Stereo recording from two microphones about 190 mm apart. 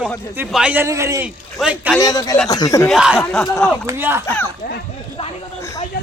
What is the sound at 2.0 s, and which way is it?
Speech, 20° left (ahead or behind).